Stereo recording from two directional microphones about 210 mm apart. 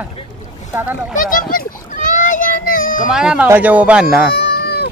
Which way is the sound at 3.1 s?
5° right (ahead or behind).